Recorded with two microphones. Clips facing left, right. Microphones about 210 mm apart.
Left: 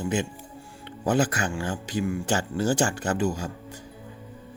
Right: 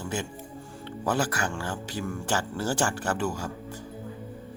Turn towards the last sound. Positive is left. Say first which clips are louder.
# left 3 dB
turn(degrees=15)  # may be behind; listen again after turning